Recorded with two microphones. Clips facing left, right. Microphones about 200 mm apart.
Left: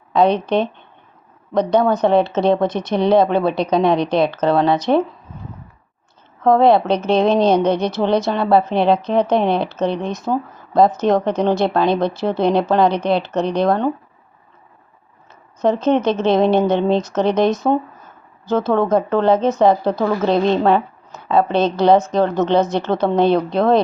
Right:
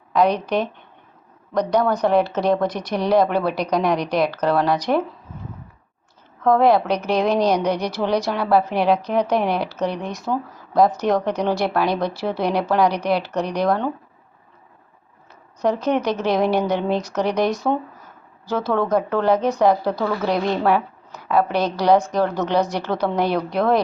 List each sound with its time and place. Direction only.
0.1 s a woman's voice: 25° left (ahead or behind)
6.4 s a woman's voice: 25° left (ahead or behind)
15.6 s a woman's voice: 25° left (ahead or behind)